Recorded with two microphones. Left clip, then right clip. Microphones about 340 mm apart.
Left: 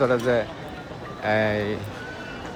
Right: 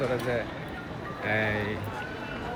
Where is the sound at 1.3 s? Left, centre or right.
Centre.